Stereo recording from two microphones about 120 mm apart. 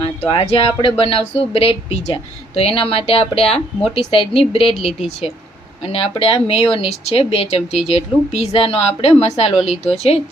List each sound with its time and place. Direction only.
0.2 s speech: 55° left (ahead or behind)